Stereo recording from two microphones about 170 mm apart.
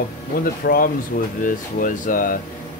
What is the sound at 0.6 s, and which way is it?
Speech, 60° left (ahead or behind).